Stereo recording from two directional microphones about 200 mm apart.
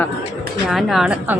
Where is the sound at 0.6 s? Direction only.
Centre (ahead or behind).